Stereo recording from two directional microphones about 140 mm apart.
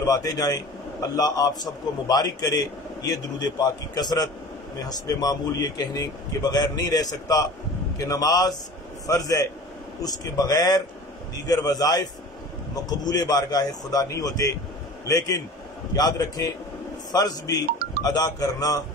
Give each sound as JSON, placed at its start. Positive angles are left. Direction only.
{"t": 0.0, "sound": "a man's voice", "side_deg": 25}